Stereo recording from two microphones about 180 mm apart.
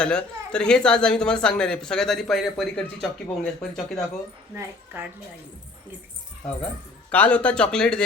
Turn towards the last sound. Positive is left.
turn(degrees=5)  # may be behind; listen again after turning